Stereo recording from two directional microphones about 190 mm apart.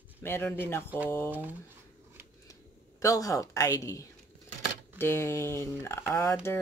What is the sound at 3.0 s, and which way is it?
Speech, 15° left (ahead or behind).